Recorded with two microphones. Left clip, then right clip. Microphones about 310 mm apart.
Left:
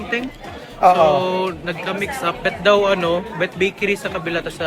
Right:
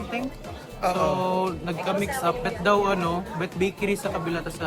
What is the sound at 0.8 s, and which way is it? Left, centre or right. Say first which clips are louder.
Speech: left 11 dB; centre.